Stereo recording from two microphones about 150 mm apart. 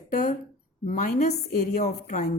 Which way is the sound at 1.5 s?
80° left.